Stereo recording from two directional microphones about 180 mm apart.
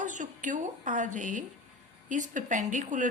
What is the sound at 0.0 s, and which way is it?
A woman's voice, 45° right (ahead or behind).